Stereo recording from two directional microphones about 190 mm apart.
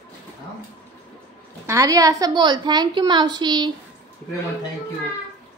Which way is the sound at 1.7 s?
15° right (ahead or behind).